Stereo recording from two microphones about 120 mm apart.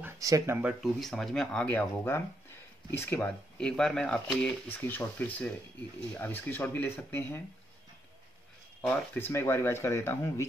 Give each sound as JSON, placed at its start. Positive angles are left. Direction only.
{"t": 0.2, "sound": "speech", "side_deg": -30}
{"t": 1.0, "sound": "speech", "side_deg": 0}
{"t": 8.8, "sound": "speech", "side_deg": 5}
{"t": 9.2, "sound": "speech", "side_deg": 20}